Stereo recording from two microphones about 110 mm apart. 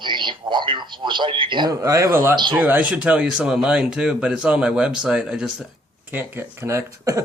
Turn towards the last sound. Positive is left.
turn(degrees=-30)  # may be behind; listen again after turning